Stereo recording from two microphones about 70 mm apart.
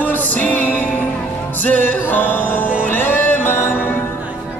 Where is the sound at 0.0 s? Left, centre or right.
Left.